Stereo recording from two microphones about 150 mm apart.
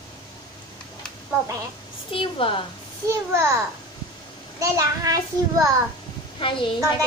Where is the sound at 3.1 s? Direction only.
20° right (ahead or behind).